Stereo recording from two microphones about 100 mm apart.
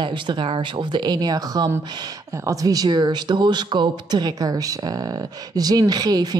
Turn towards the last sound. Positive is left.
turn(degrees=-40)  # may be behind; listen again after turning